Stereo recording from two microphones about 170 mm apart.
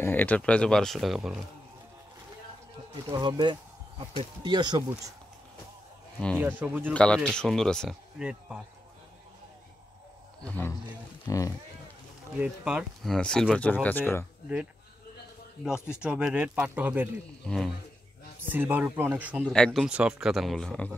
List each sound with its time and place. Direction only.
0.0 s a man's voice: 10° left (ahead or behind)
3.1 s speech: 25° right (ahead or behind)
6.1 s speech: 5° left (ahead or behind)
6.4 s speech: 10° right (ahead or behind)
6.9 s a man's voice: 5° left (ahead or behind)
10.4 s speech: 10° left (ahead or behind)
12.4 s a man's voice: 5° right (ahead or behind); by 14.2 s 10° left (ahead or behind)
16.0 s speech: 5° right (ahead or behind)
18.4 s speech: 10° right (ahead or behind)
19.4 s a man's voice: 5° left (ahead or behind)